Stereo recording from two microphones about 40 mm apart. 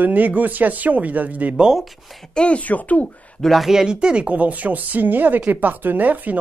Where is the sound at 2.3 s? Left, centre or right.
Left.